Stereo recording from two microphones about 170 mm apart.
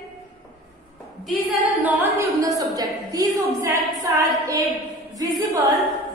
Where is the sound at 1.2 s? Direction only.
10° right (ahead or behind).